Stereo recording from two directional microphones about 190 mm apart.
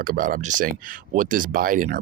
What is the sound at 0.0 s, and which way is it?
Speech, 50° right (ahead or behind).